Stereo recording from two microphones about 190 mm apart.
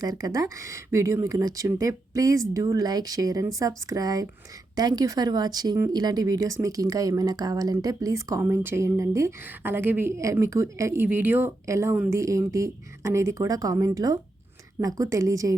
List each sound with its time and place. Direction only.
0.0 s speech: 20° right (ahead or behind)